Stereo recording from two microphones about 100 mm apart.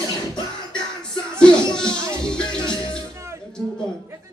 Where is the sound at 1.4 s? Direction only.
10° left (ahead or behind).